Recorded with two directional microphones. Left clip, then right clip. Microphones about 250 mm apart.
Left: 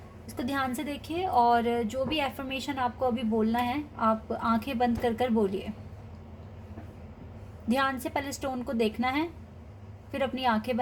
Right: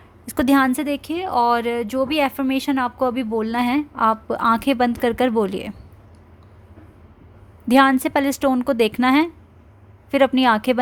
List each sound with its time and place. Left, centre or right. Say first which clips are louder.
0.3 s a woman's voice: right 13 dB; right
7.7 s a woman's voice: right 13 dB; right